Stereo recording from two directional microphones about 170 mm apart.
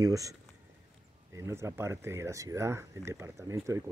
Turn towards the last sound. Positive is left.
turn(degrees=-15)  # may be behind; listen again after turning